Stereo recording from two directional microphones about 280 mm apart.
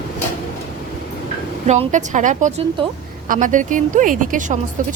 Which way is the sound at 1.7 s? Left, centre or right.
Right.